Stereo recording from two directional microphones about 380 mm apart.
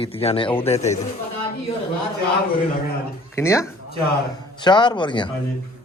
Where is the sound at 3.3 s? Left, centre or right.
Centre.